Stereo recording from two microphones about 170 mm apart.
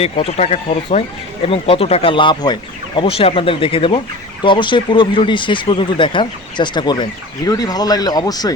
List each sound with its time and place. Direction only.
0.3 s speech: 40° left (ahead or behind); by 8.5 s 20° left (ahead or behind)